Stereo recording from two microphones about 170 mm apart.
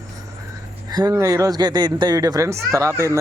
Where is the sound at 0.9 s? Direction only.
25° right (ahead or behind).